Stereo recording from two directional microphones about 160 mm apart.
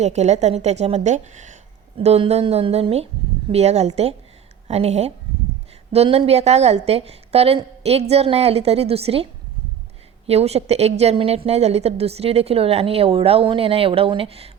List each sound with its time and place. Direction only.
0.0 s a woman's voice: 45° right (ahead or behind)
10.2 s a woman's voice: 40° right (ahead or behind)